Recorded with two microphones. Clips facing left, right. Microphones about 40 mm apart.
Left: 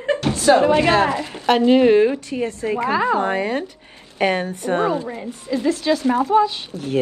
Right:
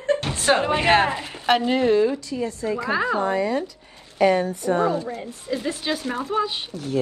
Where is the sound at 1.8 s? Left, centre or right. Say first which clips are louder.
Left 5 dB; left.